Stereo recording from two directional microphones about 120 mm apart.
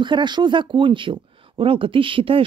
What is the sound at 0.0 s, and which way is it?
Speech, 40° right (ahead or behind).